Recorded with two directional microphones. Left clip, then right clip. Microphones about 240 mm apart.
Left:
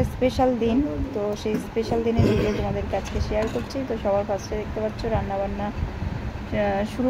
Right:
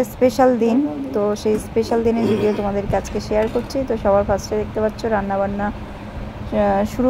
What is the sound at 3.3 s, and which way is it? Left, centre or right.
A woman's voice, centre.